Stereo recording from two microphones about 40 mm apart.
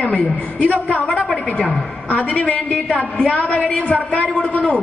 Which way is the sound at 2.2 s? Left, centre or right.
Left.